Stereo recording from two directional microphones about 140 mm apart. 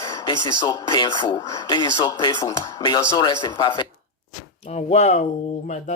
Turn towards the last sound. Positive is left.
turn(degrees=55)  # may be behind; listen again after turning